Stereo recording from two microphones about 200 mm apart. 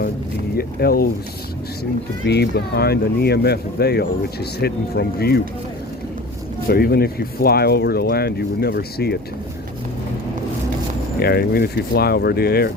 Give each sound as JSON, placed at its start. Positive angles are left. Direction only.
{"t": 0.5, "sound": "speech", "side_deg": 50}
{"t": 6.7, "sound": "speech", "side_deg": 50}
{"t": 11.2, "sound": "speech", "side_deg": 50}